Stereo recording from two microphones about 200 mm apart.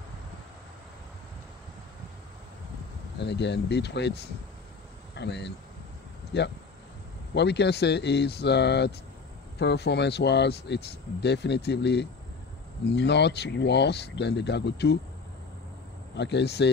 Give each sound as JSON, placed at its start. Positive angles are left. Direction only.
{"t": 3.2, "sound": "speech", "side_deg": 60}
{"t": 16.2, "sound": "speech", "side_deg": 60}